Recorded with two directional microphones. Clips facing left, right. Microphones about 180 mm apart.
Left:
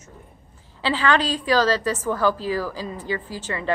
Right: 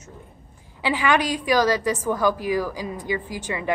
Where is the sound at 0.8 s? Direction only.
15° right (ahead or behind).